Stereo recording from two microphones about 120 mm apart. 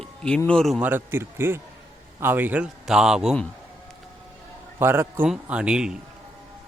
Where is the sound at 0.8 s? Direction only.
15° right (ahead or behind).